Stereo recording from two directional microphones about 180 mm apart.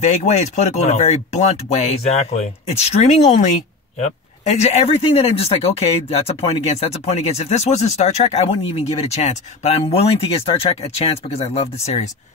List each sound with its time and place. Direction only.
0.0 s speech: 40° left (ahead or behind)